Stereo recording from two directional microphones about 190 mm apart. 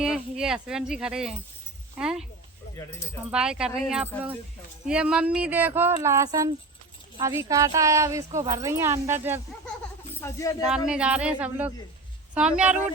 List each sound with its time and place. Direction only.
0.0 s speech: 5° right (ahead or behind)
3.3 s speech: 5° right (ahead or behind)
10.2 s speech: 15° left (ahead or behind)
10.7 s speech: 5° right (ahead or behind)